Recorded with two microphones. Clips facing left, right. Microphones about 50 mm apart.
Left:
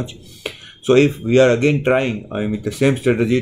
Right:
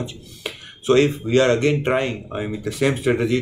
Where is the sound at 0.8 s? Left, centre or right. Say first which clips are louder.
Left 3 dB; left.